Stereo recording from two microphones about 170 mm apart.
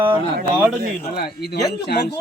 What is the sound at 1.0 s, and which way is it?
Speech, 65° left (ahead or behind).